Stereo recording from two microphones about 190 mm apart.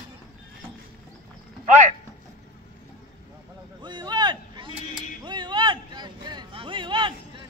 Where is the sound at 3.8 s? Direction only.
25° right (ahead or behind).